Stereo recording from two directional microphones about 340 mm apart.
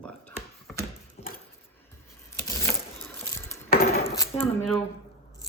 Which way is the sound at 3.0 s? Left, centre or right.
Centre.